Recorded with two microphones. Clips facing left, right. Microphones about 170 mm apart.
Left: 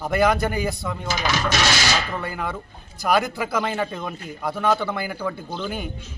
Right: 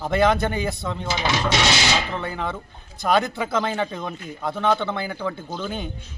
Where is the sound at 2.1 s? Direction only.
5° left (ahead or behind).